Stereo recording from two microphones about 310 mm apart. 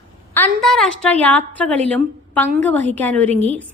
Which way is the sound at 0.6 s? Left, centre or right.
Centre.